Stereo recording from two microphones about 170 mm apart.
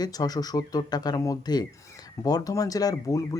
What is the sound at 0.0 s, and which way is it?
Speech, 20° left (ahead or behind).